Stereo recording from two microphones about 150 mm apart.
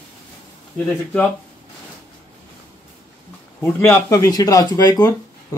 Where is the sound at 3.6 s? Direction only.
15° left (ahead or behind).